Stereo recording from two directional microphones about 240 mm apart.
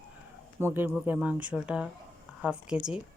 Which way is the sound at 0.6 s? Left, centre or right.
Centre.